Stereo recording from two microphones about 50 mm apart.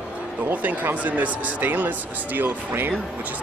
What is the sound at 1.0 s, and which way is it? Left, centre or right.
Speech, right.